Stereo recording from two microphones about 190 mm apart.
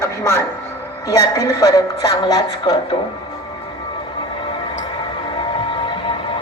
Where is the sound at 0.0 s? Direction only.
15° right (ahead or behind).